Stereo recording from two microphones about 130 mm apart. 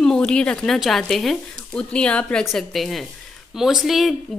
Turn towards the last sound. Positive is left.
turn(degrees=0)  # may be behind; listen again after turning